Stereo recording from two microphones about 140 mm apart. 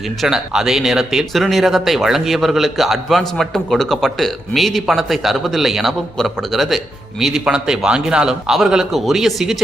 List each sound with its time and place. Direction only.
0.2 s speech: 5° right (ahead or behind)